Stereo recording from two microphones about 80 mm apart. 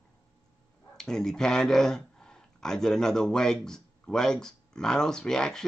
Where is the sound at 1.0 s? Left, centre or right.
Centre.